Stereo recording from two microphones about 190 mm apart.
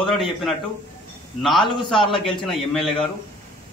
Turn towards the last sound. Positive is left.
turn(degrees=0)  # may be behind; listen again after turning